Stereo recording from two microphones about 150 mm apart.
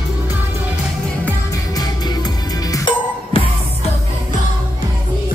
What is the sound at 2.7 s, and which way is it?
Music, 35° left (ahead or behind).